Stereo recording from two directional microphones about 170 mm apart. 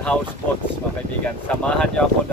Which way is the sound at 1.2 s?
5° left (ahead or behind).